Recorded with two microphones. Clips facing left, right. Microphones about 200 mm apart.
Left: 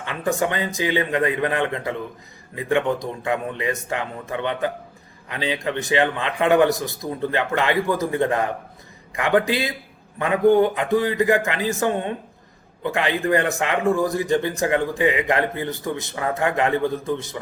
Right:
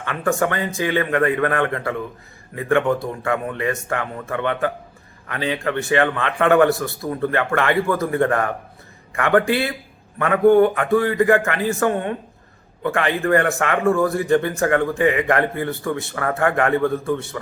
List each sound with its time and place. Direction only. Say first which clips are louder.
0.0 s speech: right 2 dB; 15° left (ahead or behind)